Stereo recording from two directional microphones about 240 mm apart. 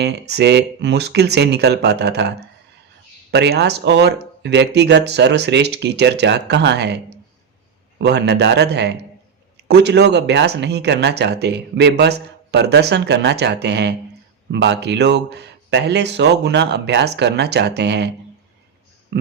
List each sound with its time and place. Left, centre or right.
0.0 s speech: right
3.3 s speech: right
8.0 s speech: right
19.1 s speech: right